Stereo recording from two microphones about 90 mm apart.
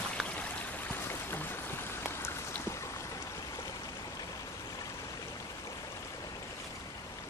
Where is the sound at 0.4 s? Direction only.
25° left (ahead or behind).